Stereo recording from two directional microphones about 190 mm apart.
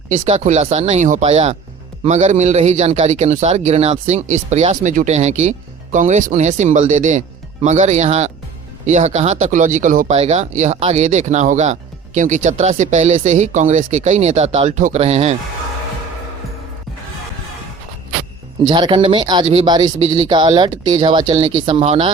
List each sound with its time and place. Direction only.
0.1 s a man's voice: 40° right (ahead or behind)
18.7 s speech: 25° right (ahead or behind)